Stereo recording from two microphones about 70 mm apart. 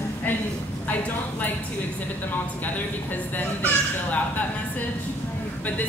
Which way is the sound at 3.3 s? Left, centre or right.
Left.